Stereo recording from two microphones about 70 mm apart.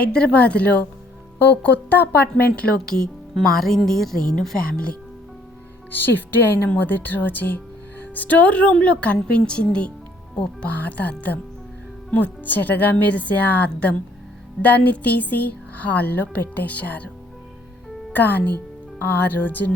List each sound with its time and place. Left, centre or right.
0.0 s speech: centre
2.8 s a woman's voice: centre
5.9 s a woman's voice: left
18.1 s speech: left